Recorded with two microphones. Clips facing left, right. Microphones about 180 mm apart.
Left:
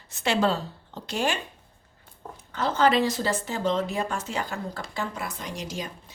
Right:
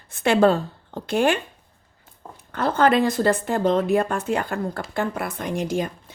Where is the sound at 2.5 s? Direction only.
55° right (ahead or behind).